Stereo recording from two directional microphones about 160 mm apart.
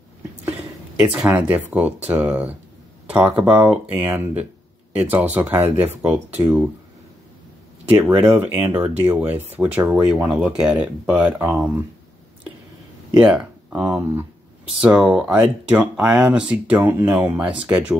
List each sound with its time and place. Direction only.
0.5 s speech: 5° right (ahead or behind)
7.9 s speech: 10° right (ahead or behind)
13.2 s speech: 5° right (ahead or behind)